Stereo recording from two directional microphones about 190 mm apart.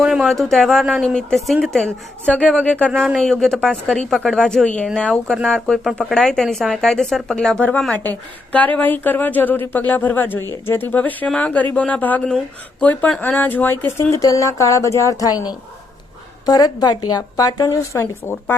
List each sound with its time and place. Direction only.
0.0 s a woman's voice: centre (ahead or behind); by 18.5 s 15° left (ahead or behind)